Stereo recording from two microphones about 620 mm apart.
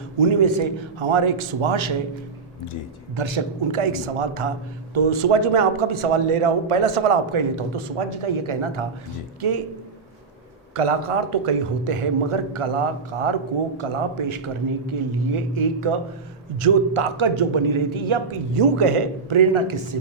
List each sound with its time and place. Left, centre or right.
0.3 s a man's voice: right
3.2 s a man's voice: right
10.8 s a man's voice: right